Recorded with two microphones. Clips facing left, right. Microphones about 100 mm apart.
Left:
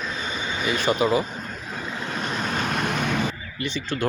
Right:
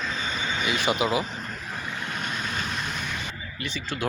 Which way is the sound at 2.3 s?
45° left (ahead or behind).